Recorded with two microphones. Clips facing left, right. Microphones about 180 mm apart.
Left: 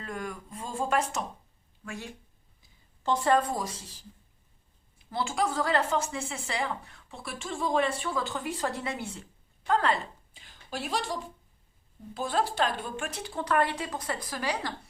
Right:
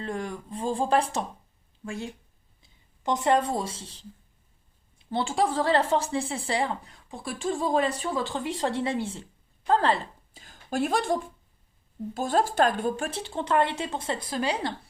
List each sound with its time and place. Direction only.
0.0 s speech: 30° right (ahead or behind)
5.1 s a woman's voice: 30° right (ahead or behind); by 13.1 s 45° right (ahead or behind)
13.1 s a woman's voice: 30° right (ahead or behind)